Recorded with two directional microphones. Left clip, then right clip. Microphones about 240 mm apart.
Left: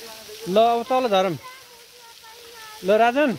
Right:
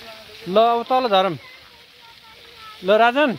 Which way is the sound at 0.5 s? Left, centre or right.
Centre.